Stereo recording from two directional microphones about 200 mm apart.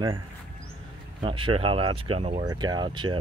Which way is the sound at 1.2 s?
25° right (ahead or behind).